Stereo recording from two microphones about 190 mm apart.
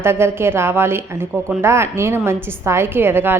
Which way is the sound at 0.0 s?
15° right (ahead or behind).